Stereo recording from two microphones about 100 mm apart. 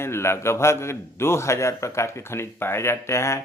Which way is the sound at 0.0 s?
25° left (ahead or behind).